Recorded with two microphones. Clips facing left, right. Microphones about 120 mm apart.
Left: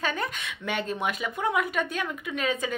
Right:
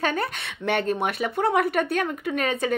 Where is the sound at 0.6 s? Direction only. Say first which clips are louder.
Right 6 dB; 60° right (ahead or behind).